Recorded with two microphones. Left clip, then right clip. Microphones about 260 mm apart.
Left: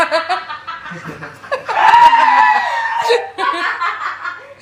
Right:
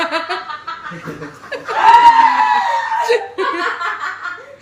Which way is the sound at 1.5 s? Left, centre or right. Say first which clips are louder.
Left 6 dB; centre.